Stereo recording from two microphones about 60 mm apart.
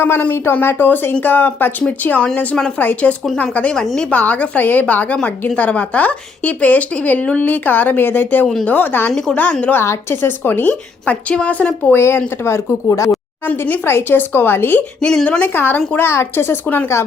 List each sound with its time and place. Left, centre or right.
0.0 s a woman's voice: left
9.8 s speech: left
10.2 s a woman's voice: left
11.9 s speech: left
13.8 s speech: left
15.0 s a woman's voice: centre
15.5 s speech: left